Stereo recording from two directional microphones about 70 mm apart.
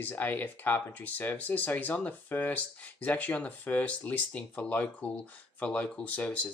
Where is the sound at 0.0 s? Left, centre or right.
Left.